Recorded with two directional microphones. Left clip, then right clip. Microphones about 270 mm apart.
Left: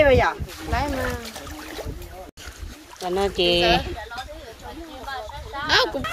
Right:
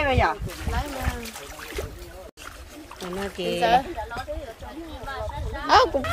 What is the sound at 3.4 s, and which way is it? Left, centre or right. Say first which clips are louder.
Speech: left 8 dB; centre.